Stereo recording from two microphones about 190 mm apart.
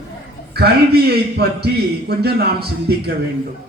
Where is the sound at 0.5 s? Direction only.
55° right (ahead or behind).